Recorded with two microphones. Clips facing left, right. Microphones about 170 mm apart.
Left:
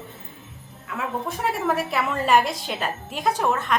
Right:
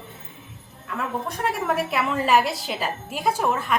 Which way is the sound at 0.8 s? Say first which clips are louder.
Even; 5° left (ahead or behind).